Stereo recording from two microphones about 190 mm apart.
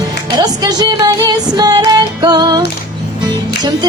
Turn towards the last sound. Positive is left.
turn(degrees=-20)  # may be behind; listen again after turning